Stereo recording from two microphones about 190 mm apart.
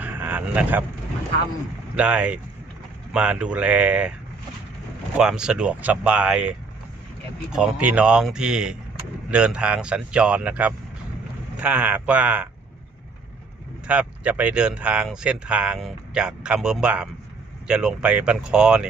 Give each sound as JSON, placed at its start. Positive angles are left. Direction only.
{"t": 0.0, "sound": "a sound", "side_deg": -10}
{"t": 2.0, "sound": "speech", "side_deg": -5}
{"t": 5.1, "sound": "speech", "side_deg": -5}
{"t": 13.8, "sound": "speech", "side_deg": -5}